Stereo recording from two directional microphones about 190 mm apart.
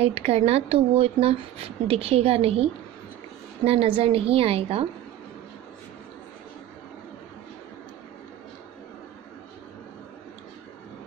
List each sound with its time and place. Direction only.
0.0 s speech: 30° right (ahead or behind)